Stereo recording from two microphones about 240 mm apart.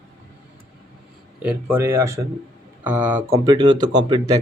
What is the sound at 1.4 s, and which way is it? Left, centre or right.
Speech, centre.